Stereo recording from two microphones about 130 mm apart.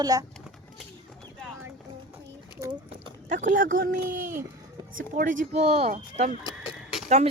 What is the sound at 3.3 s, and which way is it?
Speech, 85° right.